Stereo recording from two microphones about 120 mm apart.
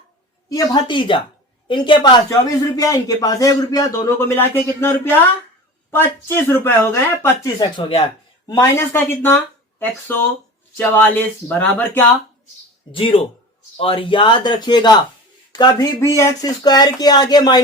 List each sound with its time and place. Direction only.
0.5 s a man's voice: 40° left (ahead or behind); by 7.5 s 20° left (ahead or behind)
8.5 s speech: 20° left (ahead or behind)
12.9 s a man's voice: 50° left (ahead or behind)